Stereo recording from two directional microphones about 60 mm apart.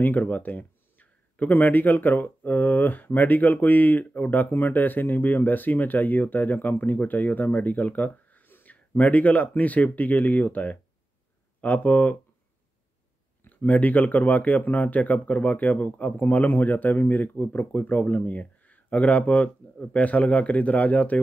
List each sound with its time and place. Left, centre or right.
0.0 s speech: left
13.4 s speech: left